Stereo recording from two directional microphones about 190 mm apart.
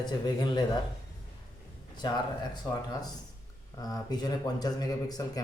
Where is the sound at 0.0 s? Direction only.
20° left (ahead or behind).